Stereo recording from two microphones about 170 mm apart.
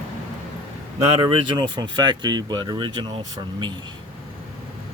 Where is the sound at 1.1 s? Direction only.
25° right (ahead or behind).